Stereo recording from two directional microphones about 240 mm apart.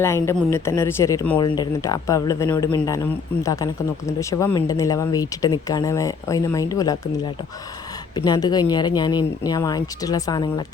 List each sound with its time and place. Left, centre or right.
0.0 s speech: centre
8.1 s speech: centre